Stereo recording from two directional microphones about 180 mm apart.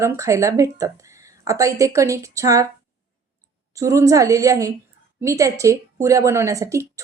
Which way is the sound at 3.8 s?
20° right (ahead or behind).